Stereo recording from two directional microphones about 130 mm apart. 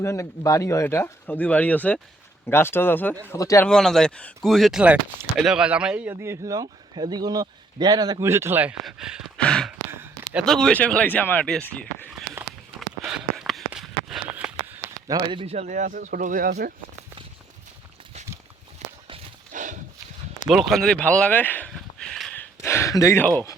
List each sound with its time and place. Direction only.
0.0 s speech: 25° left (ahead or behind)
3.3 s speech: 25° left (ahead or behind)
3.7 s speech: 5° left (ahead or behind)
6.1 s speech: 20° right (ahead or behind)
8.2 s speech: 20° right (ahead or behind)
8.7 s speech: 5° right (ahead or behind)
9.4 s speech: 5° left (ahead or behind)
13.1 s a sound: 5° right (ahead or behind)
15.0 s speech: 35° right (ahead or behind)
15.5 s speech: 70° right (ahead or behind); by 16.5 s 90° right
18.8 s walk: 60° right (ahead or behind)
19.5 s horse: 75° right (ahead or behind)
20.5 s speech: 5° right (ahead or behind)
22.4 s a sound: 20° left (ahead or behind)